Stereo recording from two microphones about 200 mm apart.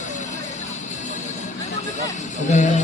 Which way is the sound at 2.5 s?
35° left (ahead or behind).